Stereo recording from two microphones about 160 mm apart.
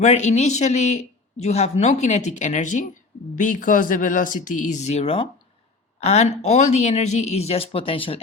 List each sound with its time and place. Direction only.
0.0 s speech: 45° left (ahead or behind)